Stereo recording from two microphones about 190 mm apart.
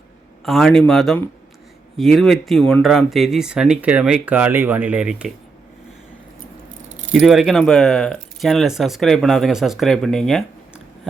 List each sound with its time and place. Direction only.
0.4 s speech: centre (ahead or behind)
7.1 s speech: centre (ahead or behind)